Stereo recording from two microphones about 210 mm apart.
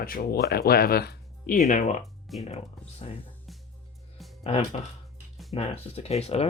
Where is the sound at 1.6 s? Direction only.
35° left (ahead or behind).